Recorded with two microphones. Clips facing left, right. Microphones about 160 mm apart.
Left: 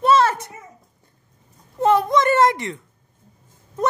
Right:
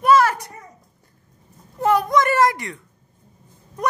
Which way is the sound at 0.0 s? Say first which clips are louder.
Right 1 dB; 25° left (ahead or behind).